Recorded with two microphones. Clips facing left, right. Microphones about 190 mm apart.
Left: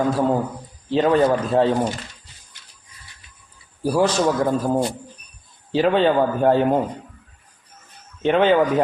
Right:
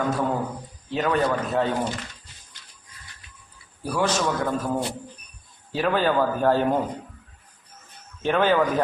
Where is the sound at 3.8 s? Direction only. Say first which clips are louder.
Left 6 dB; 30° left (ahead or behind).